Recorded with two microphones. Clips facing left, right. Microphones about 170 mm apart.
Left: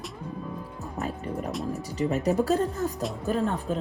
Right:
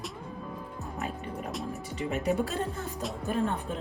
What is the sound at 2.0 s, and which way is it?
Speech, 40° left (ahead or behind).